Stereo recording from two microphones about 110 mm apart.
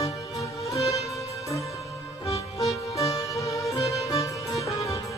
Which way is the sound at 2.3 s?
30° left (ahead or behind).